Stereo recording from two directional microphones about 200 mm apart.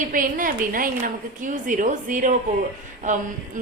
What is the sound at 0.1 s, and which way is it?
A woman's voice, 40° right (ahead or behind).